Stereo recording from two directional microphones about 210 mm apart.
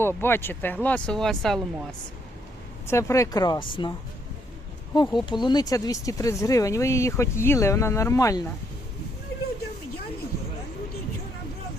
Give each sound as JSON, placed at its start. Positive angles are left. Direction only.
{"t": 0.0, "sound": "speech", "side_deg": 10}
{"t": 2.8, "sound": "speech", "side_deg": 15}
{"t": 4.9, "sound": "speech", "side_deg": 20}